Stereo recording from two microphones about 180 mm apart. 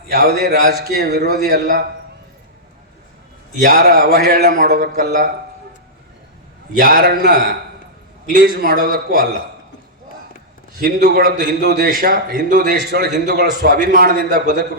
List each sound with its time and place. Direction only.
0.1 s a man's voice: 65° right (ahead or behind)
3.6 s a man's voice: 60° right (ahead or behind)
6.7 s a man's voice: 60° right (ahead or behind)
10.8 s a man's voice: 55° right (ahead or behind)
13.6 s a man's voice: 50° right (ahead or behind)